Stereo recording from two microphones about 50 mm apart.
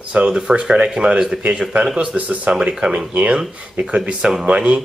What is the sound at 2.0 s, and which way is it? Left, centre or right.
Speech, right.